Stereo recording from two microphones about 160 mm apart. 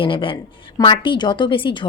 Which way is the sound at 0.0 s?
30° left (ahead or behind).